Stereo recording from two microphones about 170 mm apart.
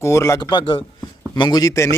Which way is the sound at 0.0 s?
15° left (ahead or behind).